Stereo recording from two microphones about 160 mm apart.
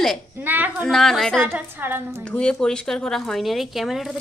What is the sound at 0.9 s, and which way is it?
Speech, centre (ahead or behind).